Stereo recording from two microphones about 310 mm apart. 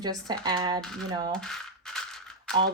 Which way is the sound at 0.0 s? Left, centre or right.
Centre.